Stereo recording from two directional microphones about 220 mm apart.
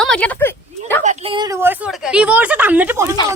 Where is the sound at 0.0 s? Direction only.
5° left (ahead or behind).